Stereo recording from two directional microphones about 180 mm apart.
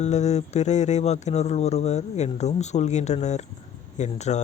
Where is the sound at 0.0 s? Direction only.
40° left (ahead or behind).